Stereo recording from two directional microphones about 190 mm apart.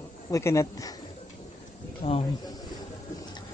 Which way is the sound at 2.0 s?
30° left (ahead or behind).